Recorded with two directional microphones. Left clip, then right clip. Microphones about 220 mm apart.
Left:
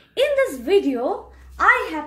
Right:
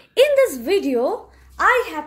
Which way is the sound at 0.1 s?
45° right (ahead or behind).